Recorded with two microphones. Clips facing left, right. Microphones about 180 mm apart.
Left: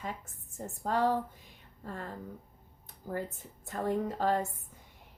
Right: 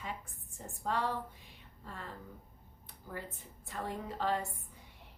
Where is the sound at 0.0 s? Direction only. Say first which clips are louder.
Left 3 dB; 45° left (ahead or behind).